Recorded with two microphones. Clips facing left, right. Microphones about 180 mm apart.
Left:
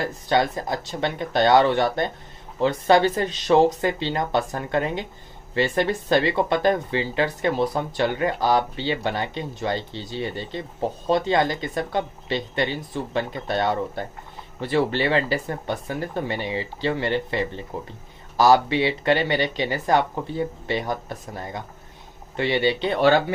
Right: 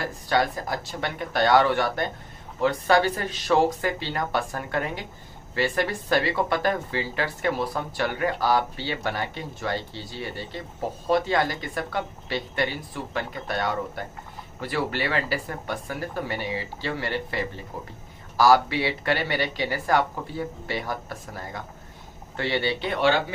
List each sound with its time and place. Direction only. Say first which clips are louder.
0.3 s speech: left 2 dB; 20° left (ahead or behind)
22.8 s speech: left 3 dB; 40° left (ahead or behind)